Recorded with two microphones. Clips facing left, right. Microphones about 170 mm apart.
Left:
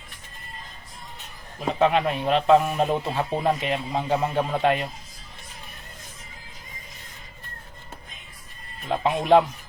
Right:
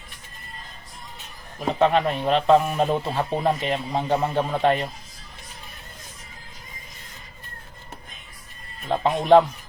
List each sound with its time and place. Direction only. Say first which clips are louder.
1.8 s a man's voice: right 1 dB; 5° left (ahead or behind)
8.9 s a man's voice: right 2 dB; 5° left (ahead or behind)